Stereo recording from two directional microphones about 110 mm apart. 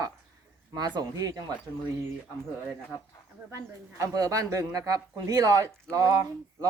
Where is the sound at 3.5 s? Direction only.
35° right (ahead or behind).